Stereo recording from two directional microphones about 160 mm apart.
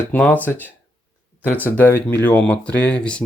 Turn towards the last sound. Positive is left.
turn(degrees=5)  # may be behind; listen again after turning